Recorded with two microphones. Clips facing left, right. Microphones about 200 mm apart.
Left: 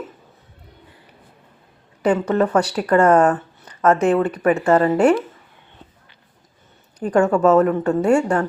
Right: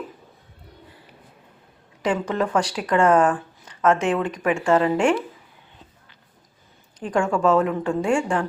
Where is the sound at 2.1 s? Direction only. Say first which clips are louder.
Left 5 dB; 40° left (ahead or behind).